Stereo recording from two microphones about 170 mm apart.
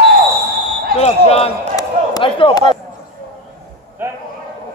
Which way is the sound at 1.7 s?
25° left (ahead or behind).